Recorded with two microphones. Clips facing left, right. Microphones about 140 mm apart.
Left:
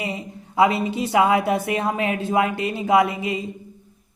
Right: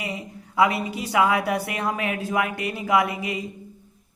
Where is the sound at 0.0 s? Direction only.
25° left (ahead or behind).